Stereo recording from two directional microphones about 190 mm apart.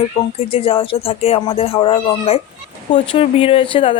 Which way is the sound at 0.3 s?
30° left (ahead or behind).